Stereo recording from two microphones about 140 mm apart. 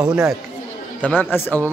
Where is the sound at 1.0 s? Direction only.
10° left (ahead or behind).